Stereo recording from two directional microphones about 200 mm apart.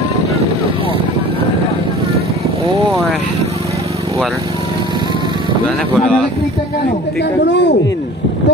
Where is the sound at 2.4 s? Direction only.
30° right (ahead or behind).